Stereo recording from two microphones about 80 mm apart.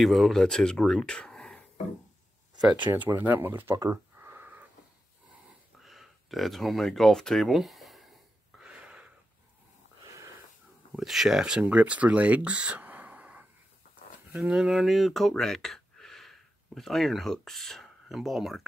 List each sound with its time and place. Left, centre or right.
0.0 s speech: centre
3.2 s speech: right
3.9 s a sound: right
5.8 s speech: centre
8.5 s wheeze: centre
10.9 s speech: centre
11.6 s speech: centre
14.5 s speech: centre